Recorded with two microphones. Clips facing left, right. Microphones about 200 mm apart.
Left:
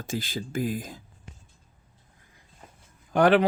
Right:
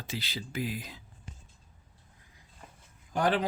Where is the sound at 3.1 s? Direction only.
70° left (ahead or behind).